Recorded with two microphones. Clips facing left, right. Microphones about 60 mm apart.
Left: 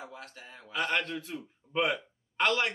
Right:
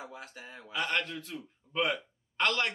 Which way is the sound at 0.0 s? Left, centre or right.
Centre.